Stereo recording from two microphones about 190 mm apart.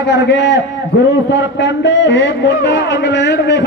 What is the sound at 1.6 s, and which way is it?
A man's voice, 70° left (ahead or behind).